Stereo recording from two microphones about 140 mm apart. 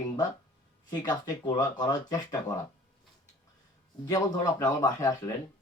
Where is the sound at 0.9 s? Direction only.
25° left (ahead or behind).